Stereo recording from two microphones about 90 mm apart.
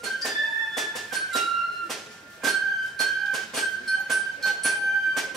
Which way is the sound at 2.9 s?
Centre (ahead or behind).